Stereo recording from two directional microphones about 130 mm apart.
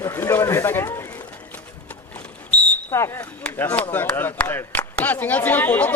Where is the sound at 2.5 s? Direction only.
15° left (ahead or behind).